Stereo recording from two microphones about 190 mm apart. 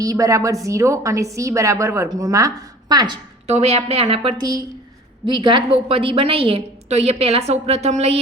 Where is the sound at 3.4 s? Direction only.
35° right (ahead or behind).